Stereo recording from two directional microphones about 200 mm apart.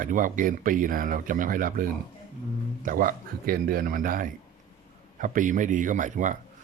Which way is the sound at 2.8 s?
45° right (ahead or behind).